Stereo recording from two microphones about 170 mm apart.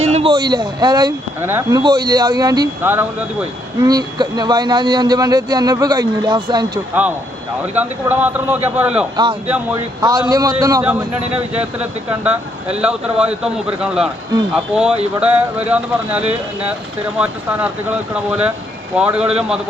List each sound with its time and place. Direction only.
0.0 s speech: 35° right (ahead or behind)
1.4 s a man's voice: 15° right (ahead or behind)
1.8 s a man's voice: 25° right (ahead or behind)
2.8 s a man's voice: 10° right (ahead or behind)
3.8 s a man's voice: 20° right (ahead or behind)
7.8 s a man's voice: 10° right (ahead or behind)
9.7 s a man's voice: 25° right (ahead or behind)
11.3 s speech: 35° right (ahead or behind)
11.6 s a man's voice: 10° right (ahead or behind)